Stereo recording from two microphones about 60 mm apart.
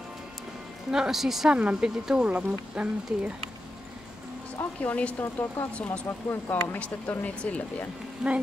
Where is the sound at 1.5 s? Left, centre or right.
Centre.